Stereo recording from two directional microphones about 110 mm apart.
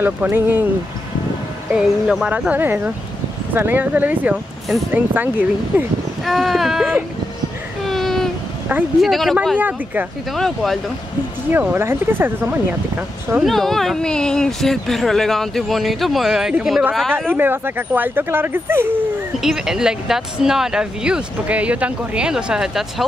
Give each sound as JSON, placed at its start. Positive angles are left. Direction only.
{"t": 0.0, "sound": "speech", "side_deg": -20}
{"t": 1.7, "sound": "speech", "side_deg": -5}
{"t": 6.2, "sound": "speech", "side_deg": 0}
{"t": 7.8, "sound": "a sound", "side_deg": 0}
{"t": 9.0, "sound": "speech", "side_deg": 0}
{"t": 9.6, "sound": "speech", "side_deg": -15}
{"t": 10.3, "sound": "speech", "side_deg": 0}
{"t": 11.5, "sound": "speech", "side_deg": -20}
{"t": 13.4, "sound": "speech", "side_deg": 0}
{"t": 17.3, "sound": "speech", "side_deg": -20}
{"t": 19.4, "sound": "speech", "side_deg": -5}